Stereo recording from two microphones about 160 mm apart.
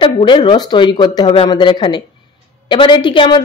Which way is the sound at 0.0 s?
30° left (ahead or behind).